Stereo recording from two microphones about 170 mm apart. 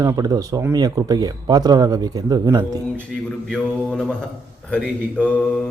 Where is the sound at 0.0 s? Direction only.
20° right (ahead or behind).